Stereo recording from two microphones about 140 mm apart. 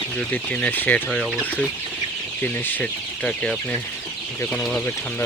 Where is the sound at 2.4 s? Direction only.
15° left (ahead or behind).